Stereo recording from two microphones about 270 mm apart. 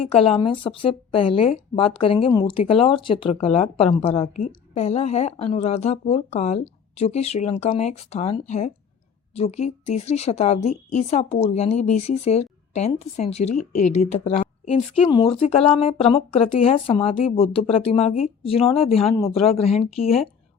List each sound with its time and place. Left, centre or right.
0.0 s speech: left
13.6 s speech: left
14.1 s speech: left